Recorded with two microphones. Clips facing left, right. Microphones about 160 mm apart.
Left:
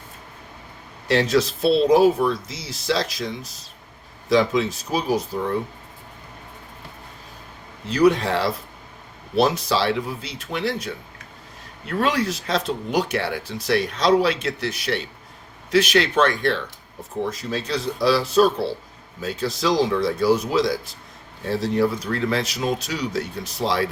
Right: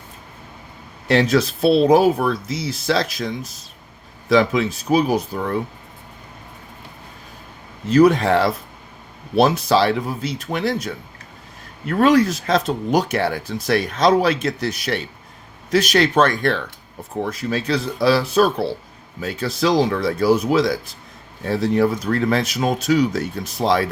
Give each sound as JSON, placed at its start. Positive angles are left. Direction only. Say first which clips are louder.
{"t": 1.0, "sound": "speech", "louder": "right 2 dB", "side_deg": -55}
{"t": 4.3, "sound": "speech", "louder": "right 2 dB", "side_deg": -60}
{"t": 7.9, "sound": "speech", "louder": "right 4 dB", "side_deg": -45}
{"t": 17.2, "sound": "speech", "louder": "right 6 dB", "side_deg": -60}